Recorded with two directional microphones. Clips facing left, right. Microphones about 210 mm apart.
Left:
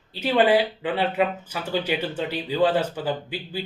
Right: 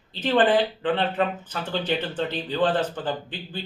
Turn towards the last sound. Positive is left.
turn(degrees=10)  # may be behind; listen again after turning